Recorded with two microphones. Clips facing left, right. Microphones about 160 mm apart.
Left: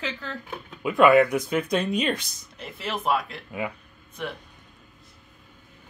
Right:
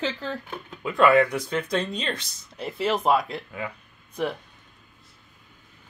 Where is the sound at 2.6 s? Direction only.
35° right (ahead or behind).